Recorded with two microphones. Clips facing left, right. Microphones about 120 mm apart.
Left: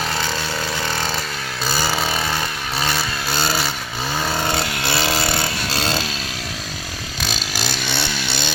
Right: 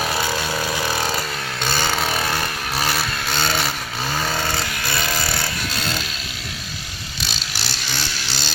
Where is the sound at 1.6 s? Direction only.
5° left (ahead or behind).